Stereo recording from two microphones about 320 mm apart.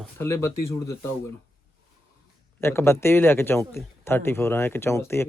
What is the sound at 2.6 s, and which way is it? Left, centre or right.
Speech, centre.